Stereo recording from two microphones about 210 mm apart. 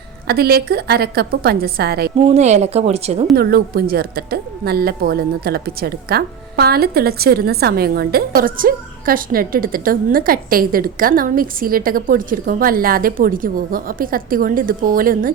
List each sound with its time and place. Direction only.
0.3 s a woman's voice: 50° right (ahead or behind)
2.3 s speech: 30° right (ahead or behind)
3.3 s a woman's voice: 50° right (ahead or behind)